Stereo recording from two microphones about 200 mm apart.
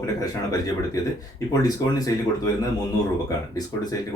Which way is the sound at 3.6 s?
20° left (ahead or behind).